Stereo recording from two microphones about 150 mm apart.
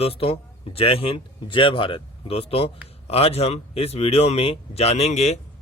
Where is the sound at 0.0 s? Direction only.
40° left (ahead or behind).